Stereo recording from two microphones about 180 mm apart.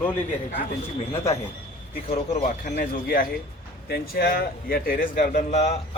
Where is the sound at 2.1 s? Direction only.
40° left (ahead or behind).